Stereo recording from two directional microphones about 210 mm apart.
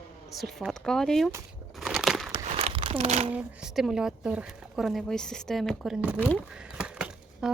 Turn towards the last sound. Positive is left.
turn(degrees=-5)  # may be behind; listen again after turning